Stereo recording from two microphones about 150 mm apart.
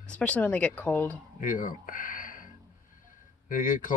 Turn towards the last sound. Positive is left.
turn(degrees=60)  # may be behind; listen again after turning